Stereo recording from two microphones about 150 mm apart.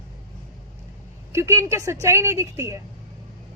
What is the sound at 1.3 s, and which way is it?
A woman's voice, 20° right (ahead or behind).